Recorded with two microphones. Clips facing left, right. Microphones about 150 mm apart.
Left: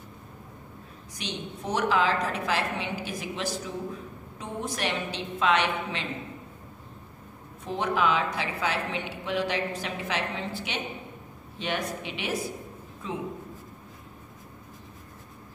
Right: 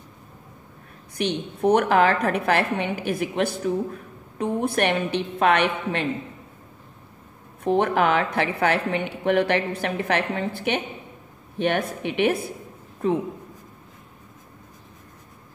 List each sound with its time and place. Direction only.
1.1 s a woman's voice: 60° right (ahead or behind)
7.6 s a woman's voice: 60° right (ahead or behind)